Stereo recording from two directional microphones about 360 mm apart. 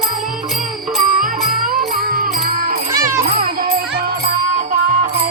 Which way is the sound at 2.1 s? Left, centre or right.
Right.